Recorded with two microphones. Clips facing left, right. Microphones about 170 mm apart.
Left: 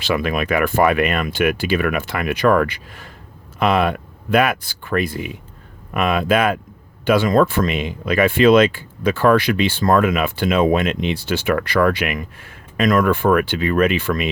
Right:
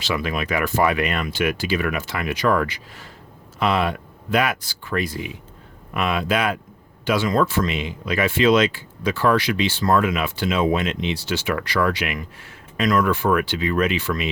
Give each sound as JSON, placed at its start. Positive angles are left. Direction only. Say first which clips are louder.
{"t": 0.0, "sound": "speech", "louder": "left 5 dB", "side_deg": 55}